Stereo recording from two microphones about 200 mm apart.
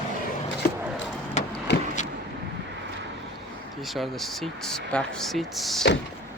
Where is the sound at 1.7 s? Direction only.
60° left (ahead or behind).